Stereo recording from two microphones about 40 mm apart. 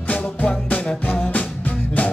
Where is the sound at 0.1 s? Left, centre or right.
Left.